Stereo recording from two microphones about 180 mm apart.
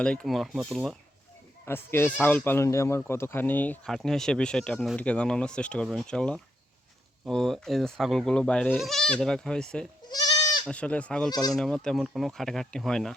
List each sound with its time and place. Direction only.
0.0 s speech: 5° left (ahead or behind)
1.6 s speech: 15° left (ahead or behind)
10.1 s goat: 20° left (ahead or behind)
10.7 s speech: 5° left (ahead or behind)
11.3 s speech: 20° left (ahead or behind)
11.5 s speech: 5° left (ahead or behind)